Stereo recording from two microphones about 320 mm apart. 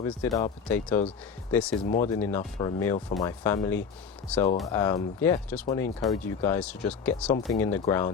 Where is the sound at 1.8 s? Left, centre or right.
Left.